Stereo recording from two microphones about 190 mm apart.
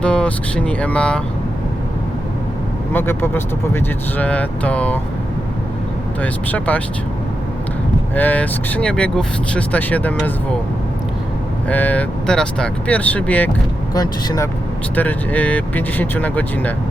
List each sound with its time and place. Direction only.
0.0 s speech: 5° left (ahead or behind)
2.9 s speech: 10° left (ahead or behind)
6.2 s speech: 10° left (ahead or behind)
8.1 s speech: 10° left (ahead or behind)
11.7 s speech: 10° left (ahead or behind)
13.9 s speech: 20° left (ahead or behind)